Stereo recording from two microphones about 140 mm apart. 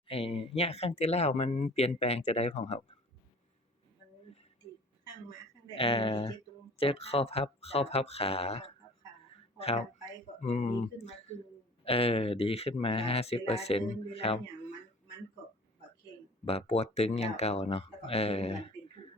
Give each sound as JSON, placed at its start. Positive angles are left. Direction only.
{"t": 0.1, "sound": "speech", "side_deg": 40}
{"t": 5.7, "sound": "speech", "side_deg": 40}
{"t": 16.5, "sound": "speech", "side_deg": 45}